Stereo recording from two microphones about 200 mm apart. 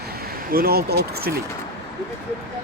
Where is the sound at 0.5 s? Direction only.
50° right (ahead or behind).